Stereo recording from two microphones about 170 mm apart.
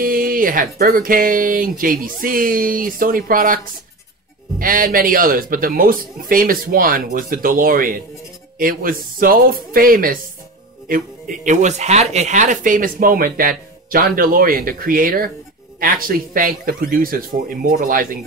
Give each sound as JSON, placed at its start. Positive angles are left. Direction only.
{"t": 0.0, "sound": "speech", "side_deg": -55}